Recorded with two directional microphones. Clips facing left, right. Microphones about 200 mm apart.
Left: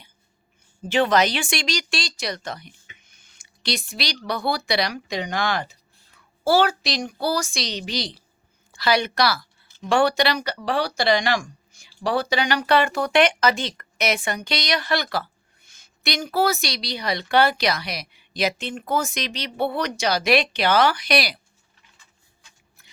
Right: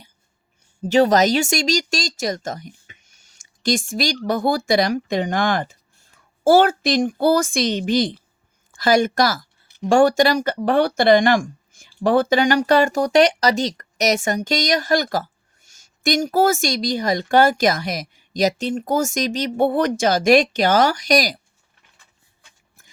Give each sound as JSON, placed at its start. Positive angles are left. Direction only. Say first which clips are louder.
{"t": 0.8, "sound": "speech", "louder": "right 5 dB", "side_deg": -40}